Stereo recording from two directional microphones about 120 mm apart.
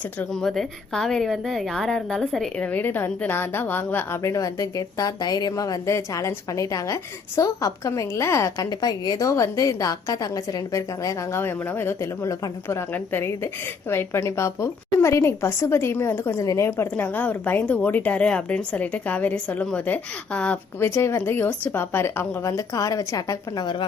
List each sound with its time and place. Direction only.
0.4 s a woman's voice: 5° left (ahead or behind)
2.6 s a woman's voice: 15° left (ahead or behind)